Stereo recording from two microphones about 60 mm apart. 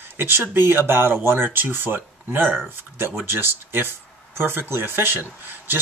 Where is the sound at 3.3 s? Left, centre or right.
Right.